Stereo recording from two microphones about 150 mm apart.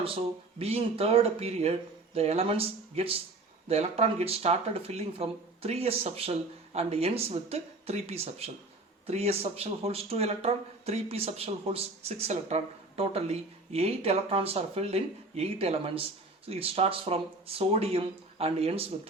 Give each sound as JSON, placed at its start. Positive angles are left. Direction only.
{"t": 0.6, "sound": "speech", "side_deg": -40}